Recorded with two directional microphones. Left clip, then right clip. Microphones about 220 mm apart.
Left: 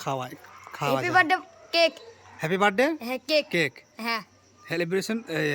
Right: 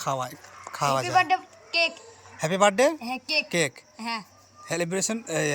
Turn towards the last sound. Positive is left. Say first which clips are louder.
# right 1 dB
turn(degrees=10)  # may be behind; listen again after turning